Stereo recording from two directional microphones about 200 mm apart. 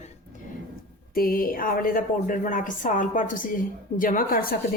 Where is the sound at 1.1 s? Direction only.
45° left (ahead or behind).